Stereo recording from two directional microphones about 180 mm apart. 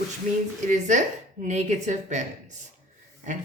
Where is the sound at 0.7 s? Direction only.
45° right (ahead or behind).